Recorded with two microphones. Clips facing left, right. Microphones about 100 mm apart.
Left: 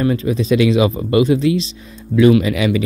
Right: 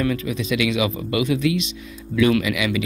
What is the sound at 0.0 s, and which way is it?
A man's voice, 35° left (ahead or behind).